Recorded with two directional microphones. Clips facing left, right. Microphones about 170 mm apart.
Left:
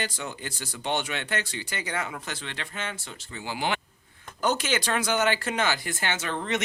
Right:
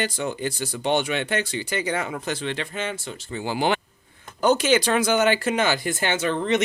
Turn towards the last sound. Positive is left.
turn(degrees=-25)  # may be behind; listen again after turning